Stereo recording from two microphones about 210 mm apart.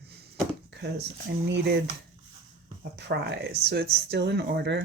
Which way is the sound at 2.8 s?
55° right (ahead or behind).